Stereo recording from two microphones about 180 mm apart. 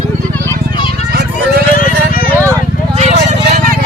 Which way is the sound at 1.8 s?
50° left (ahead or behind).